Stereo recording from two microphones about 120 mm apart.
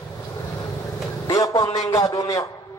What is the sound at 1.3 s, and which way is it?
A man's voice, 30° left (ahead or behind).